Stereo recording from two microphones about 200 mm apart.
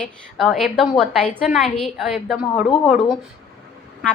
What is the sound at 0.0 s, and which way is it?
A woman's voice, centre (ahead or behind).